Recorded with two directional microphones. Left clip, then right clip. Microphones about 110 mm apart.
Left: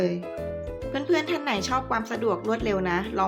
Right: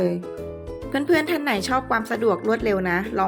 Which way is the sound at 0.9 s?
50° right (ahead or behind).